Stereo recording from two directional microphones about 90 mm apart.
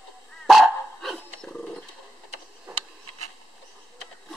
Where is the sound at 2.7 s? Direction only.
20° right (ahead or behind).